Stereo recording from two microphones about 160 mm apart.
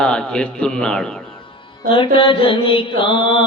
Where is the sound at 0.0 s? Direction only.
5° left (ahead or behind).